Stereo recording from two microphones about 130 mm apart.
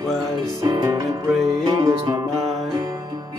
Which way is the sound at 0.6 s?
30° right (ahead or behind).